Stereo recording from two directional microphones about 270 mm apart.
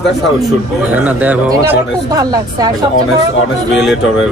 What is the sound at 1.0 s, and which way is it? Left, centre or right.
Speech, centre.